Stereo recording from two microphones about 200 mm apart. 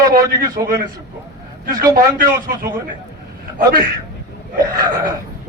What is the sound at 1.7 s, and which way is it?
Speech, 15° right (ahead or behind).